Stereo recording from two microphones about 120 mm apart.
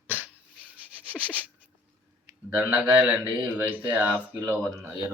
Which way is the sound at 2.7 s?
15° right (ahead or behind).